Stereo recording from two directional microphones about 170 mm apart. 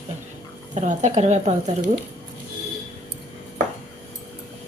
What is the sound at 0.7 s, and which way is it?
Speech, 40° right (ahead or behind).